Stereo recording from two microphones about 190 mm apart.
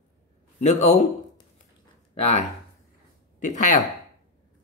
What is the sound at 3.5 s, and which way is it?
Speech, 40° left (ahead or behind).